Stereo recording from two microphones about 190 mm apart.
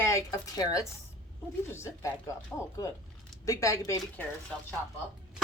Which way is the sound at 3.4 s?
15° left (ahead or behind).